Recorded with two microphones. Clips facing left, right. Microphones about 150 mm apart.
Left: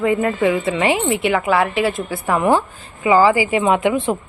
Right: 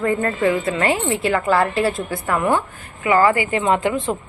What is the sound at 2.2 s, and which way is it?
A woman's voice, 20° left (ahead or behind).